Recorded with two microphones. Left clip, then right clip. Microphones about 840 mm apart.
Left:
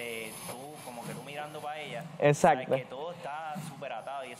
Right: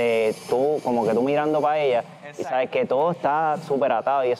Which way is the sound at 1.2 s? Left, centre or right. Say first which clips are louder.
Right 19 dB; right.